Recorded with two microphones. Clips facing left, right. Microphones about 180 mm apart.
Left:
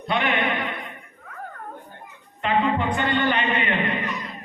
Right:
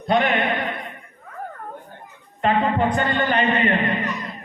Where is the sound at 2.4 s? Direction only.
40° right (ahead or behind).